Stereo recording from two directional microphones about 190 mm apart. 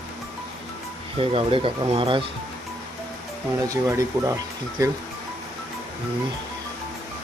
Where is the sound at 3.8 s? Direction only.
15° right (ahead or behind).